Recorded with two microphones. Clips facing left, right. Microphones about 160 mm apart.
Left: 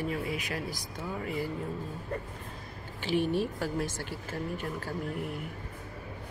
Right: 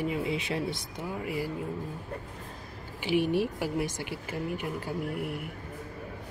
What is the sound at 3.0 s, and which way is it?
Speech, 15° right (ahead or behind).